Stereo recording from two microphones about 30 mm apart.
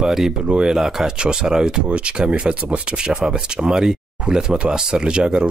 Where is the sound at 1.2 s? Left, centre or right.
Right.